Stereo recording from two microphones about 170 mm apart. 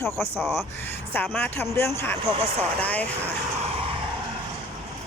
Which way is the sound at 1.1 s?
10° left (ahead or behind).